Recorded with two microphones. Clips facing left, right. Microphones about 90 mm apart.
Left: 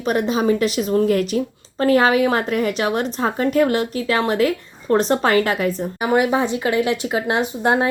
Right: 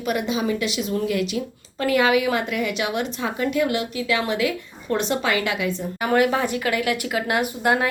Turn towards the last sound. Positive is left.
turn(degrees=25)  # may be behind; listen again after turning